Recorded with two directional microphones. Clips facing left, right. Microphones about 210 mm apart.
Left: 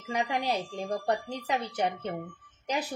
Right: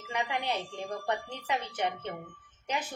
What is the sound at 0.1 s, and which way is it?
A woman's voice, 35° left (ahead or behind).